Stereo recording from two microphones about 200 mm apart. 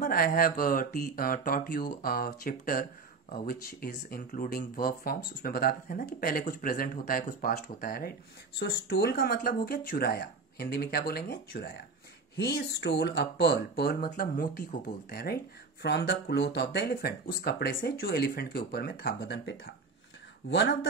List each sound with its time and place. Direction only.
0.0 s speech: 45° left (ahead or behind)
15.8 s speech: 60° left (ahead or behind)